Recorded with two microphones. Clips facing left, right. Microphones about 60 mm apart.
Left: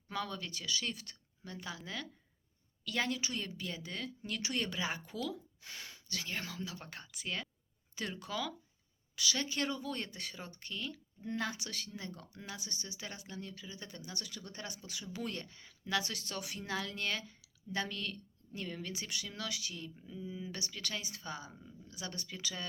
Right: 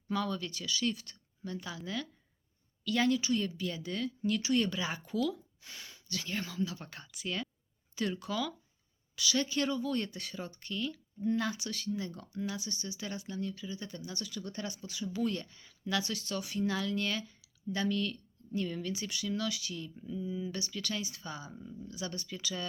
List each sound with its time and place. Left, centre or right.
0.1 s speech: left
2.8 s speech: left
3.2 s speech: left
3.4 s speech: left
11.9 s speech: left
14.0 s speech: left
14.4 s speech: left
16.6 s speech: left
18.9 s speech: left
20.6 s speech: left